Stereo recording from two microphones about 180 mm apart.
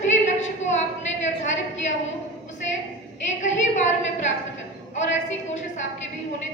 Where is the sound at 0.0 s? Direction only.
40° left (ahead or behind).